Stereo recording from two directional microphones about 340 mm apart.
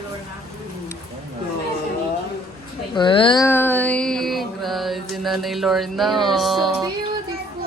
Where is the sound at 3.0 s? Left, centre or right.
Centre.